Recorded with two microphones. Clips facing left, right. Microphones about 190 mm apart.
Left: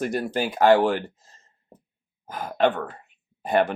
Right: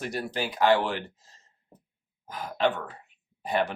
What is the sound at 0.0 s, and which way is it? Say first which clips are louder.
Speech: left 6 dB; 50° left (ahead or behind).